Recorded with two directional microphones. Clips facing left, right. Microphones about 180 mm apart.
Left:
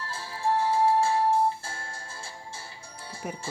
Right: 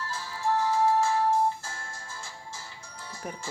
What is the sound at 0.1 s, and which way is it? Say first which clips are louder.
Music: left 1 dB; 30° left (ahead or behind).